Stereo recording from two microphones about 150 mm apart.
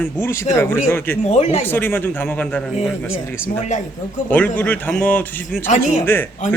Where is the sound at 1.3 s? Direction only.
45° left (ahead or behind).